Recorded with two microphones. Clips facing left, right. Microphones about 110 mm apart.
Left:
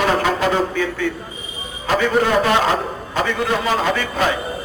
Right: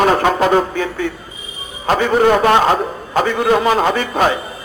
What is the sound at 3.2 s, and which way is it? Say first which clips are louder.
Speech: right 6 dB; 45° right (ahead or behind).